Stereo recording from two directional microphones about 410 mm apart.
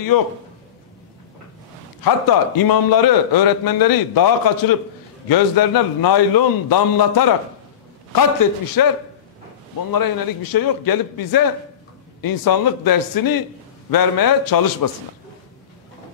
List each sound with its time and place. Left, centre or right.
2.0 s a man's voice: left
9.9 s a man's voice: left